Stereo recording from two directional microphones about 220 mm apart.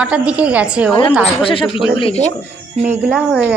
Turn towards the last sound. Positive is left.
turn(degrees=-5)  # may be behind; listen again after turning